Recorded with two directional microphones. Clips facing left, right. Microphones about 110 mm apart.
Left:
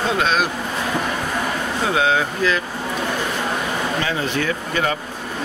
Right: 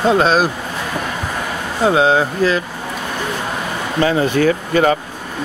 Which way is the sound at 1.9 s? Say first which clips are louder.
Right 6 dB; 30° right (ahead or behind).